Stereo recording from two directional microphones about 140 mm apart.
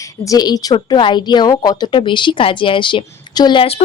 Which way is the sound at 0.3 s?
25° left (ahead or behind).